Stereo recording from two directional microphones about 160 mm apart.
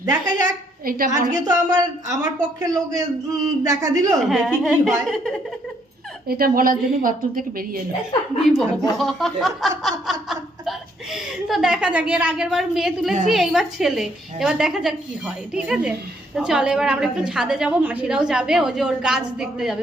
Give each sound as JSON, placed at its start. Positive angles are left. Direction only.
{"t": 0.0, "sound": "speech", "side_deg": -20}
{"t": 0.9, "sound": "a woman's voice", "side_deg": -65}
{"t": 1.1, "sound": "speech", "side_deg": -25}
{"t": 4.3, "sound": "chuckle", "side_deg": 0}
{"t": 6.2, "sound": "a woman's voice", "side_deg": -70}
{"t": 9.0, "sound": "chuckle", "side_deg": 0}